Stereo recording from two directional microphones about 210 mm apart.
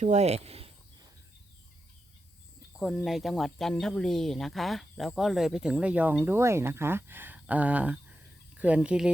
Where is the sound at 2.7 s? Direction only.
Centre (ahead or behind).